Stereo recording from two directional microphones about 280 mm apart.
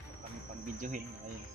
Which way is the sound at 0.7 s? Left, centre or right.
Right.